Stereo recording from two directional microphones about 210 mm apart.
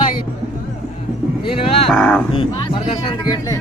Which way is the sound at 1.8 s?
5° left (ahead or behind).